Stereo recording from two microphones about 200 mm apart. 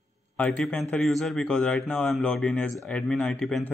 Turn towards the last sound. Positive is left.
turn(degrees=5)  # may be behind; listen again after turning